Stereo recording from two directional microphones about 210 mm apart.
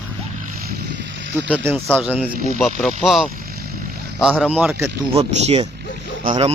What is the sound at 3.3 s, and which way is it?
Vehicle, 45° right (ahead or behind).